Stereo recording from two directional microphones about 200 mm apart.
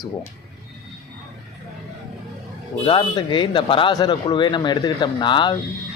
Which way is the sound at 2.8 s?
25° left (ahead or behind).